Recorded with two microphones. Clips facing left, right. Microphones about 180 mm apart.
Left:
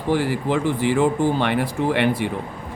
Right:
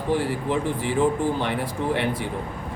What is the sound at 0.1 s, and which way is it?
Speech, 80° left.